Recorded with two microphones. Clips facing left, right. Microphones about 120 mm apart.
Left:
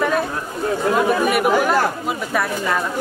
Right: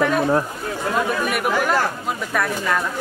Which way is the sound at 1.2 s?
5° left (ahead or behind).